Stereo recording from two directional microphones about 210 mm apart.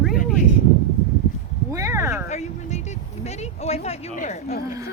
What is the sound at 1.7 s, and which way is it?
Speech, 15° right (ahead or behind).